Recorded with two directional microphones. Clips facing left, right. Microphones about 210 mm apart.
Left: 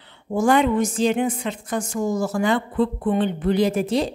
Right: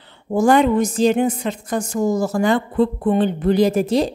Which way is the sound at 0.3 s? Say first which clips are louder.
Right 3 dB; 40° right (ahead or behind).